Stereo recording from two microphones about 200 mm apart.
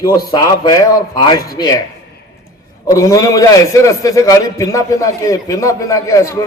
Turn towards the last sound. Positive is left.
turn(degrees=15)  # may be behind; listen again after turning